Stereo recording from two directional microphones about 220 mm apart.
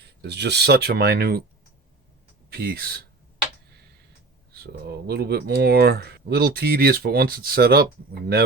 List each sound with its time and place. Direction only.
0.0 s speech: 50° right (ahead or behind)
2.5 s speech: 45° right (ahead or behind)
4.5 s speech: 45° right (ahead or behind)